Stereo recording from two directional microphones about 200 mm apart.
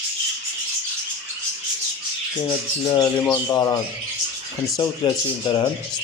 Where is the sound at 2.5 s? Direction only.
20° left (ahead or behind).